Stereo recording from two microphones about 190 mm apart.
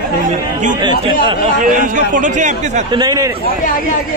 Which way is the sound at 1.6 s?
40° right (ahead or behind).